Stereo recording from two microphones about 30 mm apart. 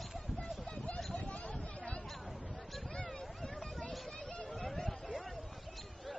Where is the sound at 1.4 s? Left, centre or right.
Left.